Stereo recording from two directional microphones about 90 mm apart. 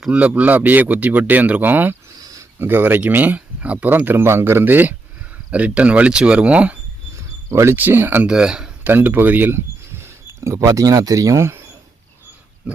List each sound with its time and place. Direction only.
0.0 s speech: 15° right (ahead or behind)
7.5 s speech: 30° right (ahead or behind)
8.3 s speech: 10° right (ahead or behind)
8.8 s speech: 20° right (ahead or behind)